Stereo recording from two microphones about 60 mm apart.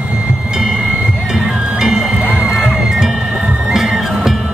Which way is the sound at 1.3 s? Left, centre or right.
Centre.